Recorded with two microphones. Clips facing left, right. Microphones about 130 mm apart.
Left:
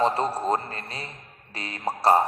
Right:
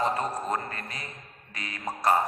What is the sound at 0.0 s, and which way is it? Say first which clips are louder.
A man's voice: left 5 dB; 30° left (ahead or behind).